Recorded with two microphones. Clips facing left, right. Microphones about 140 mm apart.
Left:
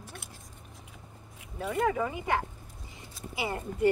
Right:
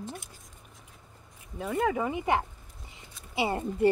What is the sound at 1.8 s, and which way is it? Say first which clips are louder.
A child's voice: right 1 dB; 25° right (ahead or behind).